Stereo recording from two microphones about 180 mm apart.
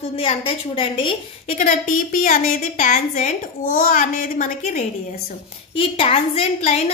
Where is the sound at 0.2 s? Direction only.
30° left (ahead or behind); by 4.8 s 45° left (ahead or behind).